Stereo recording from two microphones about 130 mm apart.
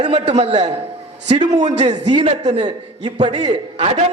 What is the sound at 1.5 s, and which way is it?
Speech, 65° right (ahead or behind).